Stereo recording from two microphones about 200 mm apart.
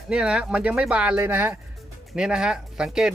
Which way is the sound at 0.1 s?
5° right (ahead or behind).